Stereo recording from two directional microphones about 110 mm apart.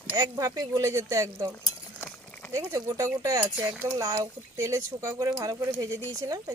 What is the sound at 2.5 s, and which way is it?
Speech, 30° right (ahead or behind).